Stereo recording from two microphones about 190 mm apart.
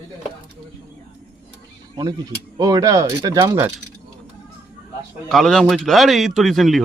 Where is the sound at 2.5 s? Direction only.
20° right (ahead or behind).